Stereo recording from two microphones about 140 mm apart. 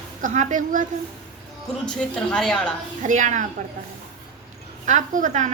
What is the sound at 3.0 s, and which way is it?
Speech, 60° right (ahead or behind).